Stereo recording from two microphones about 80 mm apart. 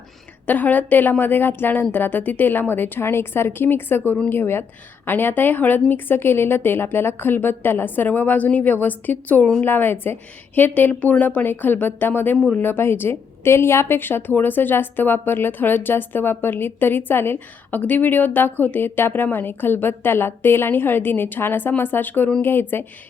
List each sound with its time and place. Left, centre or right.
0.4 s a woman's voice: left